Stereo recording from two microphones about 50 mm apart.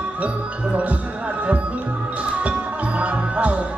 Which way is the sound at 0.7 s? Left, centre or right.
Right.